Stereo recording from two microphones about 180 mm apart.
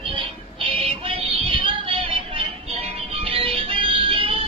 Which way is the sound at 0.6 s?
30° right (ahead or behind).